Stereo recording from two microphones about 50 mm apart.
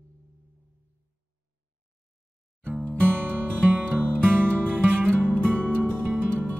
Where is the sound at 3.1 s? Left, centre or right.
Right.